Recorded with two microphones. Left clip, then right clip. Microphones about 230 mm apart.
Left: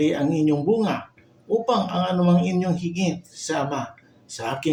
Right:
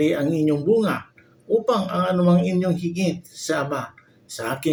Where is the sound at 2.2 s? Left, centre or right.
Centre.